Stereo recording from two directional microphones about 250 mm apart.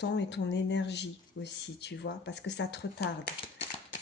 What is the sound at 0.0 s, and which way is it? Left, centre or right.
Speech, left.